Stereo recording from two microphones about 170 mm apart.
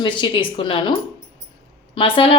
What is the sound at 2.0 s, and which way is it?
Speech, 30° left (ahead or behind).